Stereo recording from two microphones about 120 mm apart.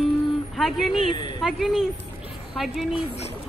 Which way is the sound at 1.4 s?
5° right (ahead or behind).